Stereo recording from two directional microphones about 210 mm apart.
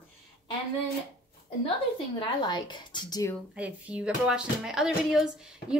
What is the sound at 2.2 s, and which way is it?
Speech, 20° left (ahead or behind).